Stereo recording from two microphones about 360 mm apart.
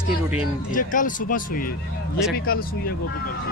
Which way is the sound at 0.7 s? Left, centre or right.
Left.